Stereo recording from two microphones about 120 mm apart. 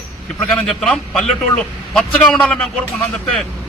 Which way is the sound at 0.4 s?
Centre (ahead or behind).